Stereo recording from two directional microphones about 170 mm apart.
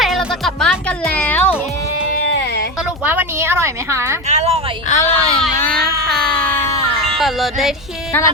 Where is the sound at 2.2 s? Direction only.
85° left.